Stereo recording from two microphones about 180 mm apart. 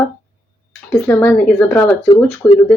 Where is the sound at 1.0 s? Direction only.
10° left (ahead or behind).